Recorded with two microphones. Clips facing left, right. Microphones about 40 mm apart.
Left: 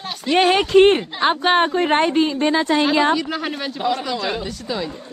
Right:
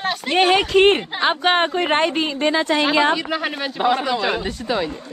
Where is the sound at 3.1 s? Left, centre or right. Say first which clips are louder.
Even; centre.